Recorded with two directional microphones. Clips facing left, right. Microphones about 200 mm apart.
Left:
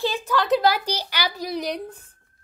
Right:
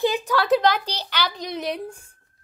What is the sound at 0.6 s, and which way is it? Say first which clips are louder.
A woman's voice: even; 10° left (ahead or behind).